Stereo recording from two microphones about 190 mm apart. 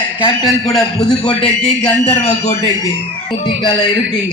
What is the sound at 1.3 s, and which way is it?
Speech, 30° left (ahead or behind).